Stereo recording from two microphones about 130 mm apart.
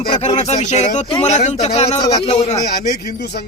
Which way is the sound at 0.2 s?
60° left (ahead or behind).